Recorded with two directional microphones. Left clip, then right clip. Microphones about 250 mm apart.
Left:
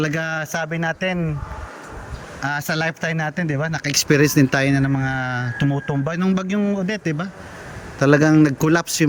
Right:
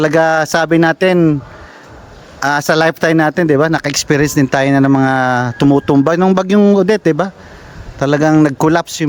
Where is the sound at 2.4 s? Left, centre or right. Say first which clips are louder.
Right 11 dB; centre.